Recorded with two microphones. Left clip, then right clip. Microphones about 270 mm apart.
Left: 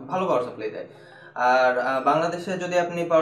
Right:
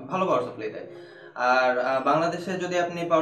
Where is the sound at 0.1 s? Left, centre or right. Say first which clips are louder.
Left 1 dB; centre.